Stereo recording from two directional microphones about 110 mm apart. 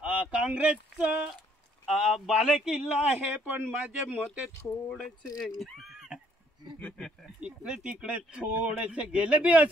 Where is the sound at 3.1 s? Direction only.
15° right (ahead or behind).